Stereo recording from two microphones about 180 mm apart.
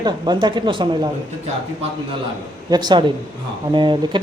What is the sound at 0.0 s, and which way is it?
Speech, 25° right (ahead or behind).